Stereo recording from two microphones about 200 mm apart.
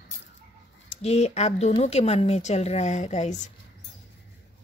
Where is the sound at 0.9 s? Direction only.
30° left (ahead or behind).